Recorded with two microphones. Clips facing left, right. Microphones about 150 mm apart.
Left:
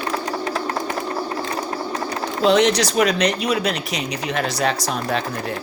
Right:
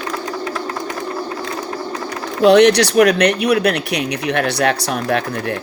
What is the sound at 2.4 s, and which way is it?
Speech, 70° right (ahead or behind).